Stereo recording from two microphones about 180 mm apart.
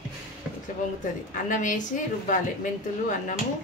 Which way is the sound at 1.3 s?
45° left (ahead or behind).